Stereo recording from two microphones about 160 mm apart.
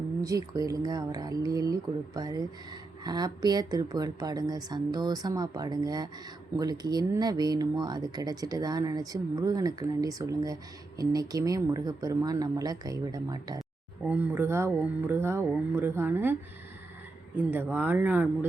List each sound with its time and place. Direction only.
0.2 s speech: 20° right (ahead or behind)
14.1 s speech: 10° right (ahead or behind)
17.3 s speech: 10° right (ahead or behind)